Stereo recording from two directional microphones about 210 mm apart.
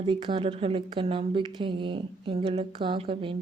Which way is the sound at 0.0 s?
25° right (ahead or behind).